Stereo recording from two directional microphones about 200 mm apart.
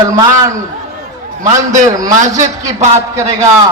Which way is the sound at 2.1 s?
40° right (ahead or behind).